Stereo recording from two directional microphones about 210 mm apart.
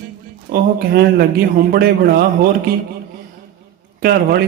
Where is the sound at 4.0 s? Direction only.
45° right (ahead or behind).